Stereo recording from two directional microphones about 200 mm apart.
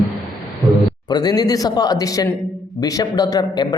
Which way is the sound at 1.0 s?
20° left (ahead or behind).